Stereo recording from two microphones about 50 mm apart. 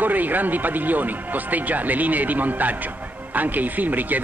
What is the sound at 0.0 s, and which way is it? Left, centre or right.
Speech, right.